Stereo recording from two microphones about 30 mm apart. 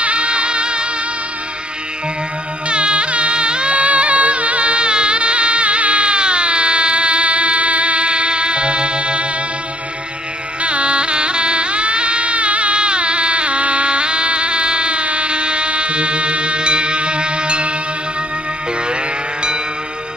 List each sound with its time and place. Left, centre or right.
0.0 s music: right
2.7 s music: right
10.6 s music: right